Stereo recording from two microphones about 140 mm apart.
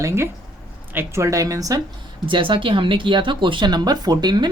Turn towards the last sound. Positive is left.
turn(degrees=-30)  # may be behind; listen again after turning